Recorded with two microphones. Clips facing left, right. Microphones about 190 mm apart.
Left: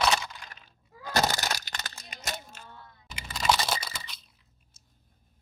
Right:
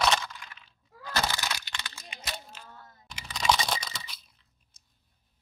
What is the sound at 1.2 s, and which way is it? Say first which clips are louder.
Crack: left 4 dB; 40° left (ahead or behind).